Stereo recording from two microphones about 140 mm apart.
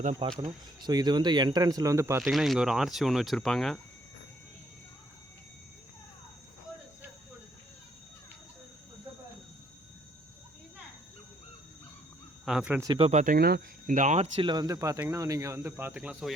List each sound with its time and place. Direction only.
0.2 s speech: 35° right (ahead or behind); by 2.2 s 20° right (ahead or behind)
2.2 s speech: centre (ahead or behind)
12.5 s speech: 5° right (ahead or behind)
13.1 s speech: 70° right (ahead or behind)
14.3 s speech: 35° right (ahead or behind); by 16.3 s 10° right (ahead or behind)